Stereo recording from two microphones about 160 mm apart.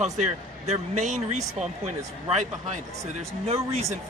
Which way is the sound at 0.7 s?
45° right (ahead or behind).